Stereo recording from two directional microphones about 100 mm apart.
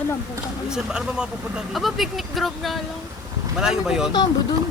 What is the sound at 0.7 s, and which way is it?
Speech, 5° right (ahead or behind).